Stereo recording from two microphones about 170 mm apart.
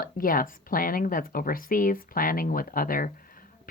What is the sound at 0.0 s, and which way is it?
Speech, 55° left (ahead or behind).